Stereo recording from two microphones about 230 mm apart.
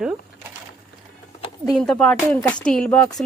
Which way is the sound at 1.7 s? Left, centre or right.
Centre.